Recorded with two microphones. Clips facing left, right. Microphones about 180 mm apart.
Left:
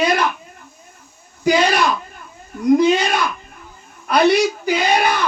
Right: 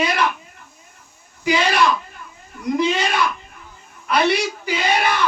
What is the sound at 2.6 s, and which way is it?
Speech, 45° left (ahead or behind).